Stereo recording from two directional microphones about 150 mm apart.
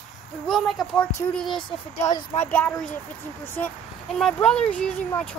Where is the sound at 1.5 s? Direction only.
35° left (ahead or behind).